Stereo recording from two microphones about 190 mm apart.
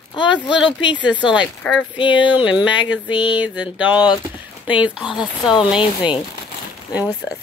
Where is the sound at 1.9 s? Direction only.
25° left (ahead or behind).